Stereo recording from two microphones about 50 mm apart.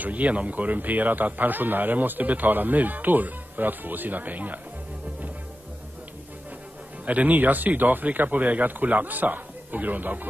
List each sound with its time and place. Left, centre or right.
0.0 s a man's voice: right
7.1 s a man's voice: right